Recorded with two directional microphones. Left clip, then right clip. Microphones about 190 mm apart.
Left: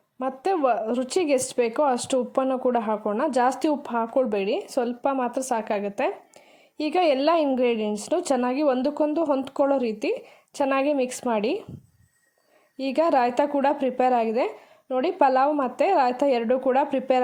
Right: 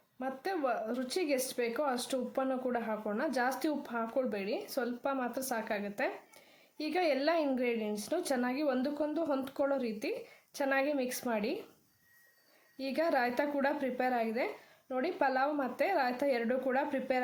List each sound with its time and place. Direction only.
0.2 s speech: 30° left (ahead or behind)
12.7 s speech: 30° left (ahead or behind)